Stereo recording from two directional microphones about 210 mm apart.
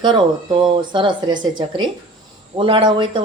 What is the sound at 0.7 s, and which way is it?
A woman's voice, 25° right (ahead or behind).